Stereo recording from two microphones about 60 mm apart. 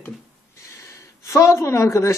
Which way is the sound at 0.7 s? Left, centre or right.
Left.